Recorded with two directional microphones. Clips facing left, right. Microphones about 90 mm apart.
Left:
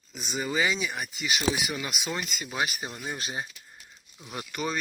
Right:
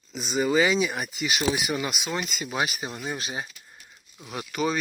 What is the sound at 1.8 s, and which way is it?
Speech, 5° right (ahead or behind).